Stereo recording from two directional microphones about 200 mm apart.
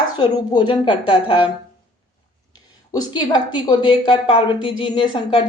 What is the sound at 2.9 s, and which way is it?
A woman's voice, 20° left (ahead or behind).